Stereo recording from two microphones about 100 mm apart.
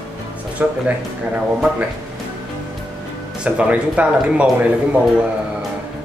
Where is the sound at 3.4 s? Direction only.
10° right (ahead or behind).